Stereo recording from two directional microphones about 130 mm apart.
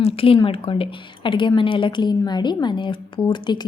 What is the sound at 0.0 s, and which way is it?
Speech, 45° left (ahead or behind).